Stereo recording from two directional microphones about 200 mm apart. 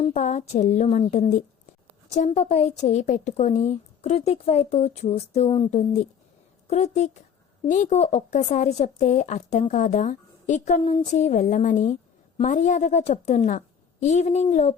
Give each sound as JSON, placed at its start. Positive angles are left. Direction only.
{"t": 0.0, "sound": "speech", "side_deg": 35}